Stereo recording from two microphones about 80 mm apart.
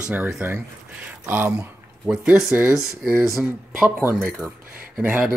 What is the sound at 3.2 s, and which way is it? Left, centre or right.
Speech, centre.